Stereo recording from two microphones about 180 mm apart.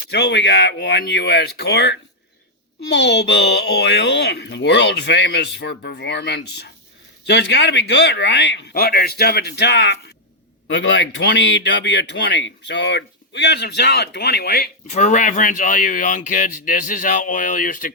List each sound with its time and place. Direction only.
0.1 s speech: 70° left (ahead or behind)
10.7 s speech: 85° left; by 14.7 s 60° left (ahead or behind)
14.8 s speech: 40° left (ahead or behind)